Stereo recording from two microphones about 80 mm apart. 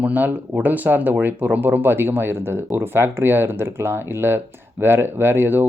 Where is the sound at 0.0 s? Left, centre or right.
Centre.